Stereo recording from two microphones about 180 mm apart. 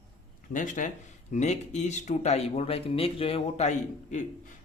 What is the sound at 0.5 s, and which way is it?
Speech, 45° left (ahead or behind).